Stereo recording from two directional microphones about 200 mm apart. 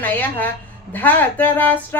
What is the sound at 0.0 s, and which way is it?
Speech, 10° left (ahead or behind).